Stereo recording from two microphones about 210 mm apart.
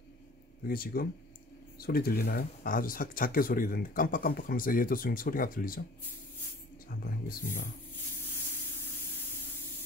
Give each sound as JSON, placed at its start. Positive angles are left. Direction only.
{"t": 0.7, "sound": "speech", "side_deg": 45}
{"t": 6.9, "sound": "speech", "side_deg": 45}